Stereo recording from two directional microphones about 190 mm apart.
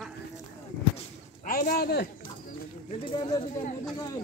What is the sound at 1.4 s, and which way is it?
Speech, 45° left (ahead or behind).